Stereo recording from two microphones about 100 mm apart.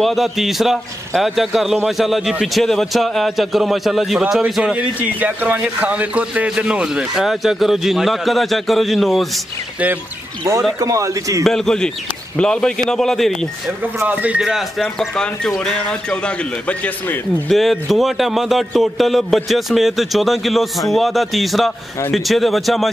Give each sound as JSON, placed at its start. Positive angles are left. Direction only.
{"t": 0.0, "sound": "a man's voice", "side_deg": 0}
{"t": 10.8, "sound": "a man's voice", "side_deg": -35}
{"t": 11.4, "sound": "a man's voice", "side_deg": 5}
{"t": 14.0, "sound": "a man's voice", "side_deg": -15}
{"t": 17.5, "sound": "a man's voice", "side_deg": 0}